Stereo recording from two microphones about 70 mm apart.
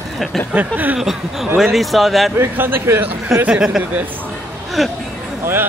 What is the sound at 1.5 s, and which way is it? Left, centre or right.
Speech, centre.